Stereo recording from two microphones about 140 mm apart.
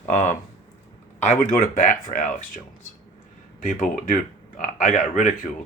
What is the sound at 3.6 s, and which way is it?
Speech, 70° left (ahead or behind).